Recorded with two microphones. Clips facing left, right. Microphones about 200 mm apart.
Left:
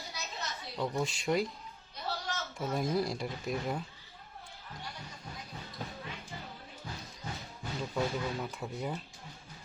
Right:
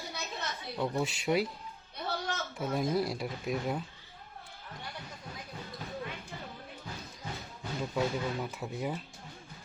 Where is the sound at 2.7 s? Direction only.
Centre (ahead or behind).